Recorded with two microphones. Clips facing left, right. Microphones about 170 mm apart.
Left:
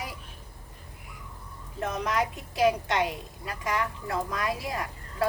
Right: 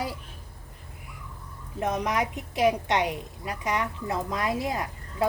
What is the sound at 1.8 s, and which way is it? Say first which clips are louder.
A woman's voice: right 2 dB; 15° right (ahead or behind).